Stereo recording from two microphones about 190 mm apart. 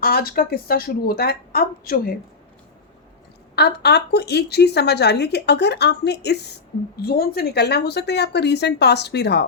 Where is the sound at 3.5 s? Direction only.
60° left (ahead or behind).